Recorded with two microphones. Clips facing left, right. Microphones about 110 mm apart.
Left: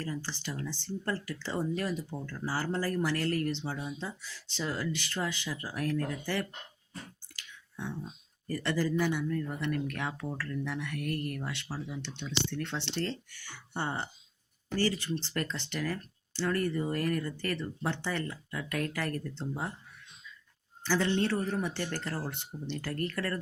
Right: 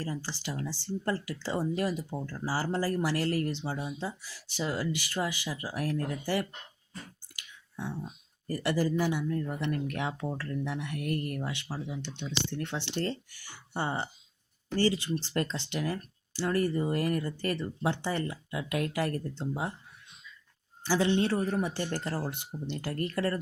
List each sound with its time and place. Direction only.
0.0 s speech: 15° right (ahead or behind)
7.3 s clicking: 15° right (ahead or behind)
8.6 s speech: 15° right (ahead or behind)
20.8 s speech: 15° right (ahead or behind)